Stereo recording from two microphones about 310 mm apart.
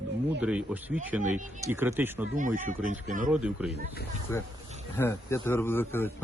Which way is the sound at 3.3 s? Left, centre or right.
Centre.